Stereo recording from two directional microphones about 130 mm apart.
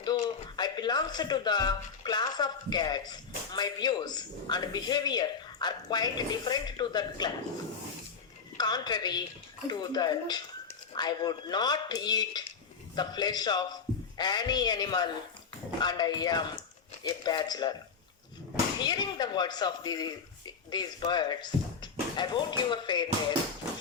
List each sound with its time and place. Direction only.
0.0 s speech: 30° left (ahead or behind)
8.5 s speech: 30° left (ahead or behind)
18.8 s speech: 35° left (ahead or behind)